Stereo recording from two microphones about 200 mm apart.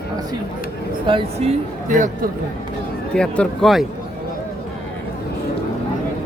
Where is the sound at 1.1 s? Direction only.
30° right (ahead or behind).